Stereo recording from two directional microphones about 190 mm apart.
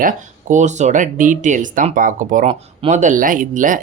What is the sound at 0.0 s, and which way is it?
Speech, 40° right (ahead or behind).